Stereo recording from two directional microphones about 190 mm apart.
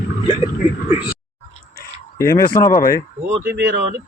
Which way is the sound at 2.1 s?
15° left (ahead or behind).